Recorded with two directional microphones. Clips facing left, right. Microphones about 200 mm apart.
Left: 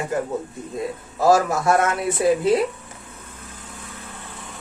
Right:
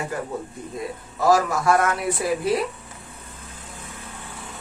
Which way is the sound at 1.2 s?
25° left (ahead or behind).